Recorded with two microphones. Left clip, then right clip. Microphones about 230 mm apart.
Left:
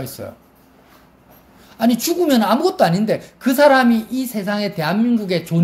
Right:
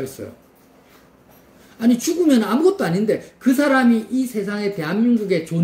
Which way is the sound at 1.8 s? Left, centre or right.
Left.